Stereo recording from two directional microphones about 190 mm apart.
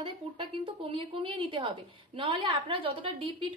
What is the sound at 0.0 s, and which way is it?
A woman's voice, 30° right (ahead or behind).